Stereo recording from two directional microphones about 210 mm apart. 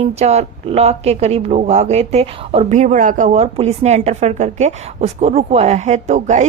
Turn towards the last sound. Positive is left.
turn(degrees=-35)  # may be behind; listen again after turning